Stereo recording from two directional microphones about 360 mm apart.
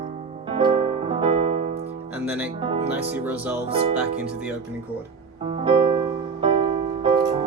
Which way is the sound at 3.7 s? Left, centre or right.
Centre.